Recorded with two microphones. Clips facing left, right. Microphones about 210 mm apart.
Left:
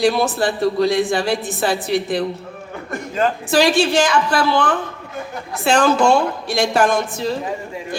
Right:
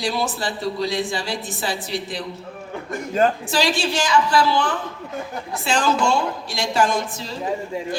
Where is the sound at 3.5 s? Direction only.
55° left (ahead or behind).